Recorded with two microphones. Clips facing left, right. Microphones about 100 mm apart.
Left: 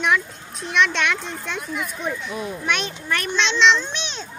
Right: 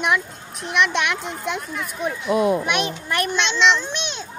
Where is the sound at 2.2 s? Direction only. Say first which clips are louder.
Right 11 dB; 80° right.